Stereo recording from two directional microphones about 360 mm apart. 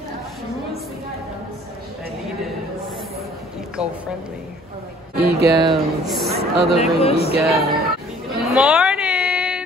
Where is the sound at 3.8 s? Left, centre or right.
Centre.